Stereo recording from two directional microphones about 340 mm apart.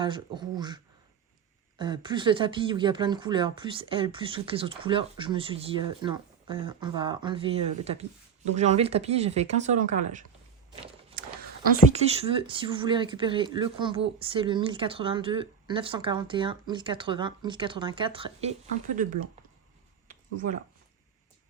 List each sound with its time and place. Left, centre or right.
0.0 s speech: centre
1.8 s speech: centre
11.9 s speech: centre
20.1 s a sound: right